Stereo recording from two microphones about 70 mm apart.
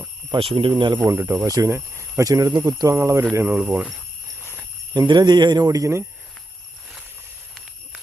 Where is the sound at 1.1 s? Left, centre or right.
Right.